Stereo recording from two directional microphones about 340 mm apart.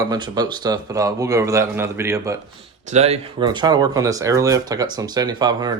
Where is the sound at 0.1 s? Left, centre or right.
Centre.